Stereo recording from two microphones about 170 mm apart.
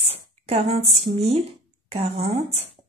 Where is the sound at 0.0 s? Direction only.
35° right (ahead or behind).